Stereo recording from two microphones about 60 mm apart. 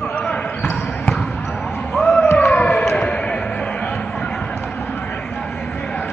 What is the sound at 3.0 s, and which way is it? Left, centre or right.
Music, centre.